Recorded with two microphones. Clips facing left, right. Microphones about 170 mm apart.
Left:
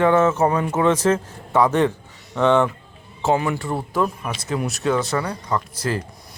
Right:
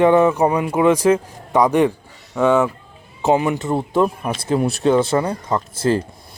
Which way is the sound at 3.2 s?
20° right (ahead or behind).